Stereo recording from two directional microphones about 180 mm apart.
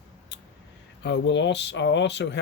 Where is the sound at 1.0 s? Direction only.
80° left.